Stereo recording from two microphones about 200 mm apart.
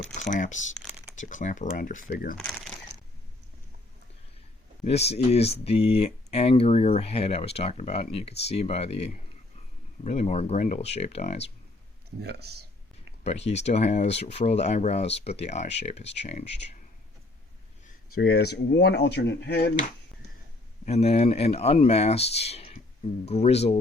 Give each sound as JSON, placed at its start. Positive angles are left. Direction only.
{"t": 0.3, "sound": "speech", "side_deg": 40}
{"t": 2.4, "sound": "crumpling", "side_deg": 5}
{"t": 4.8, "sound": "speech", "side_deg": 30}
{"t": 12.2, "sound": "speech", "side_deg": -55}
{"t": 13.2, "sound": "speech", "side_deg": 35}
{"t": 18.1, "sound": "speech", "side_deg": 55}
{"t": 20.8, "sound": "speech", "side_deg": 30}